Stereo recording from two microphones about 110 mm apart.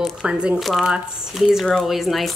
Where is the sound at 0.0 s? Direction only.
5° right (ahead or behind).